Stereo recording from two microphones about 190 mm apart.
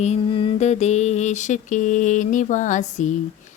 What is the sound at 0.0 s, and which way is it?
Speech, 30° left (ahead or behind).